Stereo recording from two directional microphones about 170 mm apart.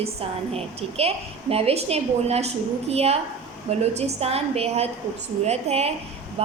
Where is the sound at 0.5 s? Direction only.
35° right (ahead or behind).